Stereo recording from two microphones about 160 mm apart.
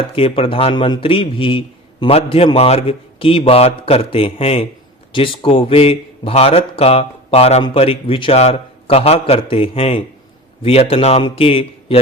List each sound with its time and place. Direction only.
0.0 s speech: 35° left (ahead or behind)